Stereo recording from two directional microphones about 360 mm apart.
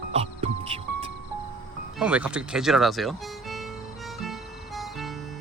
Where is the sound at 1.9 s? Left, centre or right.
Centre.